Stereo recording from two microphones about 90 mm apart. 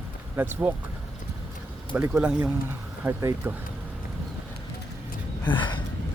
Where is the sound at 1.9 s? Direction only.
20° right (ahead or behind).